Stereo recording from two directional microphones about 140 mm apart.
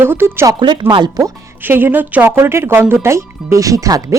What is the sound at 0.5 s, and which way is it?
Speech, 35° right (ahead or behind).